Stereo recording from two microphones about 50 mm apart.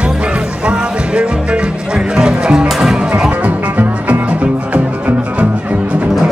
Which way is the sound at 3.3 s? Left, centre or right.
Right.